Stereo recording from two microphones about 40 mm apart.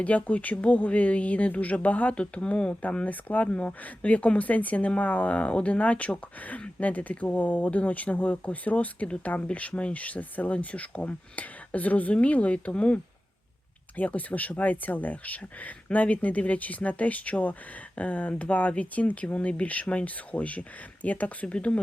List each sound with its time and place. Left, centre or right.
0.2 s speech: left
21.4 s speech: left